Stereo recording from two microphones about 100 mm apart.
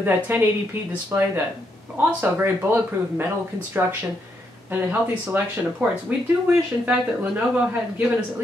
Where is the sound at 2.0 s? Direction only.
15° right (ahead or behind).